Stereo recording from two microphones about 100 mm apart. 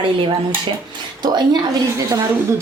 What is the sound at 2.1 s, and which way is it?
Speech, 30° right (ahead or behind).